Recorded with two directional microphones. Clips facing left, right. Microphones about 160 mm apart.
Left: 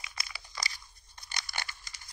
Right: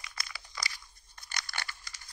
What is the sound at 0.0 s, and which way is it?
Crumpling, 20° left (ahead or behind).